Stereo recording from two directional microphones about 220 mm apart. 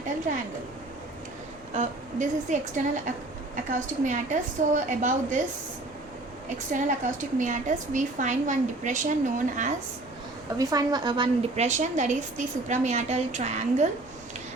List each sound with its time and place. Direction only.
1.7 s a woman's voice: 30° right (ahead or behind)
6.7 s a woman's voice: 35° right (ahead or behind)
10.6 s a woman's voice: 15° right (ahead or behind); by 13.8 s 30° right (ahead or behind)